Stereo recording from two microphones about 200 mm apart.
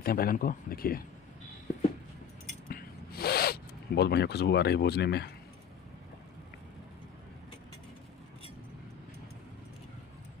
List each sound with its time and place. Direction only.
0.0 s speech: 50° left (ahead or behind)
2.7 s zipper: 50° left (ahead or behind)